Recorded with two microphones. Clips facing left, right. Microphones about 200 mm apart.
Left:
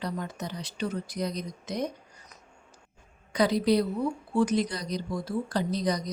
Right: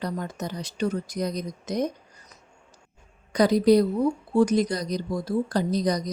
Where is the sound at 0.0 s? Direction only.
45° right (ahead or behind).